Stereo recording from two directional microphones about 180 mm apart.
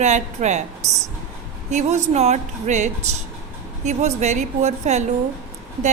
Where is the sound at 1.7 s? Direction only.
40° right (ahead or behind).